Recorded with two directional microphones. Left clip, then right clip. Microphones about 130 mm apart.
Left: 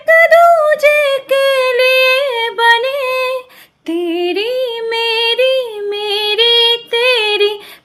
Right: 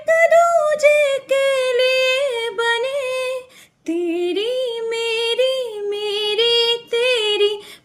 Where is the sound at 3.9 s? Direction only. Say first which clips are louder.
Left 4 dB; 25° right (ahead or behind).